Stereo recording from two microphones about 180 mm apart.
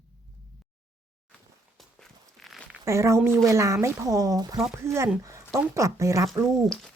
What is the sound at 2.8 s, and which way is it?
Speech, 15° right (ahead or behind).